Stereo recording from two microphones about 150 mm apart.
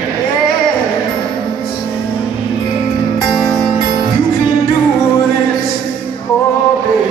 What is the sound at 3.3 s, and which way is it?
Music, centre (ahead or behind).